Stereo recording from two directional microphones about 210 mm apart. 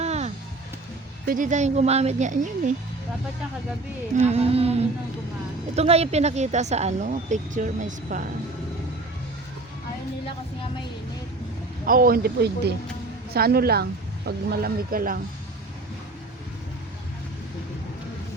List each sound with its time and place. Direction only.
0.0 s music: 30° right (ahead or behind)
1.3 s speech: 35° right (ahead or behind)
4.3 s humming: 30° right (ahead or behind)
5.7 s speech: 30° right (ahead or behind)
11.9 s speech: 45° right (ahead or behind)